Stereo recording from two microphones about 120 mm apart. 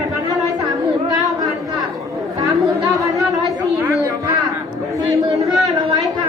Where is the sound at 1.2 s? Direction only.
Centre (ahead or behind).